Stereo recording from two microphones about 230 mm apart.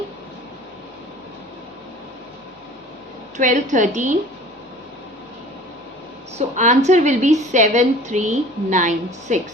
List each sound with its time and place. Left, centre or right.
3.3 s a woman's voice: right
6.6 s a woman's voice: right